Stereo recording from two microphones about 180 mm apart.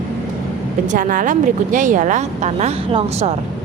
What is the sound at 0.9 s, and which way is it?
Speech, 50° right (ahead or behind).